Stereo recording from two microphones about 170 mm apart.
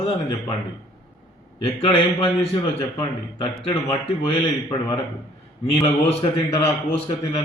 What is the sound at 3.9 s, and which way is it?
Speech, 25° left (ahead or behind).